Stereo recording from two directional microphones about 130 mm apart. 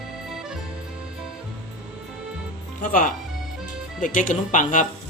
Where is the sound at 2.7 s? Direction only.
90° left.